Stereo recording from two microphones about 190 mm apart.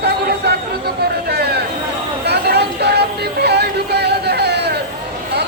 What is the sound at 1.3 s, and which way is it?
Vehicle, 60° right (ahead or behind).